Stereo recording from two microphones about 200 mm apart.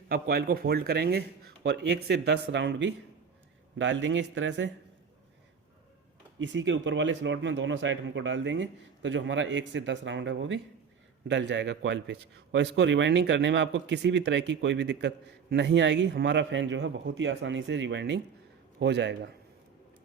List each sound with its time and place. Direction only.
0.1 s a man's voice: 50° right (ahead or behind); by 4.7 s 65° right (ahead or behind)
6.4 s a man's voice: 65° right (ahead or behind)